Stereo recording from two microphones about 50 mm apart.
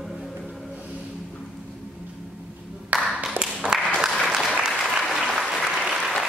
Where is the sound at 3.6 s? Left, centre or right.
Centre.